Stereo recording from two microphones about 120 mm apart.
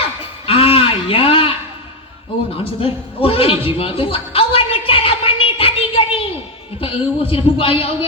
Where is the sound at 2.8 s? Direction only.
50° left (ahead or behind).